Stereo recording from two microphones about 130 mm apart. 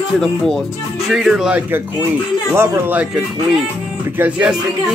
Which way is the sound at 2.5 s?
15° right (ahead or behind).